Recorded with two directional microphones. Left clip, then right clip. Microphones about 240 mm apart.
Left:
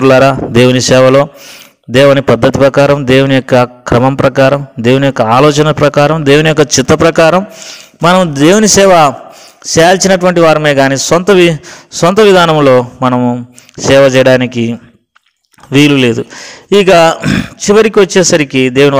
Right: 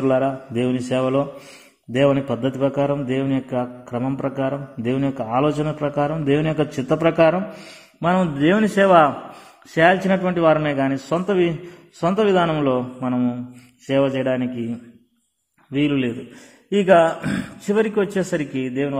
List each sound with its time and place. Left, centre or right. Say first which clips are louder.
0.0 s a man's voice: left 14 dB; left